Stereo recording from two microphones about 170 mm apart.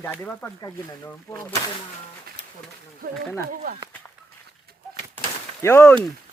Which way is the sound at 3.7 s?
55° right (ahead or behind).